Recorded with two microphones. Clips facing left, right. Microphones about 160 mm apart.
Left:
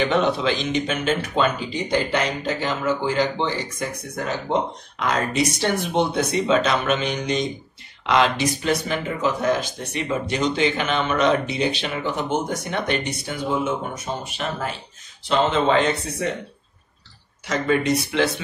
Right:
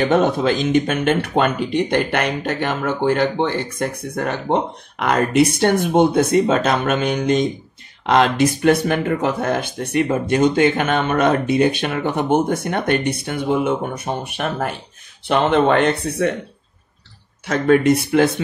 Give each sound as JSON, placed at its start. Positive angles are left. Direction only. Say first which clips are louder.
{"t": 0.1, "sound": "speech", "louder": "right 4 dB", "side_deg": -50}
{"t": 17.5, "sound": "speech", "louder": "right 6 dB", "side_deg": -55}